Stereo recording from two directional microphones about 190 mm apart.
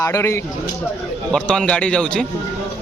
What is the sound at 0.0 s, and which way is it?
A man's voice, 15° left (ahead or behind).